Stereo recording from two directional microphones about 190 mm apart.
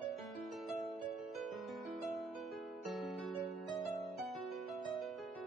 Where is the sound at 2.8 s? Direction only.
Centre (ahead or behind).